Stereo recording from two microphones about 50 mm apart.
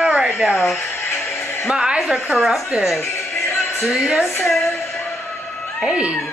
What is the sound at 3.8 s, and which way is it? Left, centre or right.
Speech, centre.